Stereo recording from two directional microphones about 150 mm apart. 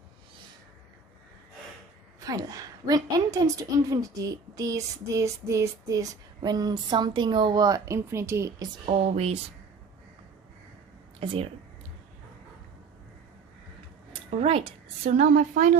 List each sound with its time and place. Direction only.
2.2 s a woman's voice: 25° right (ahead or behind)
8.9 s a woman's voice: 45° right (ahead or behind)
11.2 s speech: 35° right (ahead or behind)
14.3 s a woman's voice: 45° right (ahead or behind)